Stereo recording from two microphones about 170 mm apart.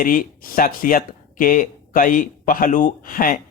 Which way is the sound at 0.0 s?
55° left (ahead or behind).